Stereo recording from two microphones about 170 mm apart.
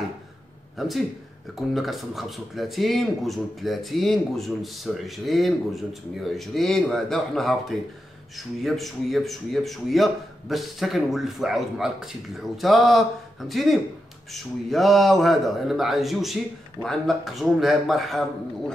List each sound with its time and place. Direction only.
0.7 s speech: centre (ahead or behind)
8.6 s speech: centre (ahead or behind)